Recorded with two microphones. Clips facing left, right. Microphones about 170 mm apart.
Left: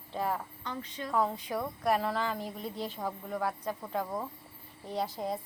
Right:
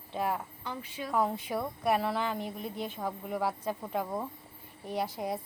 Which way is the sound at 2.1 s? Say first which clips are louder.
Right 1 dB; 20° right (ahead or behind).